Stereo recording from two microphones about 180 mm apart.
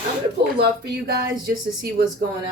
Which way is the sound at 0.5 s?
70° right (ahead or behind).